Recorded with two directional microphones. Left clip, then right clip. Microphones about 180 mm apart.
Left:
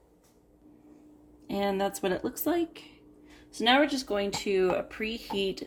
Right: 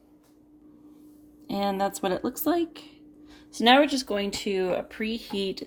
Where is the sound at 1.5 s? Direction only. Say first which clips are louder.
Right 2 dB; 20° right (ahead or behind).